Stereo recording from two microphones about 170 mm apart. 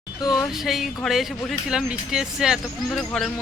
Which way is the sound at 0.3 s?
Centre (ahead or behind).